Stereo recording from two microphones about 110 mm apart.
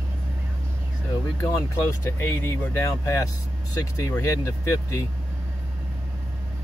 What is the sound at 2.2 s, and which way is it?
Speech, 25° left (ahead or behind).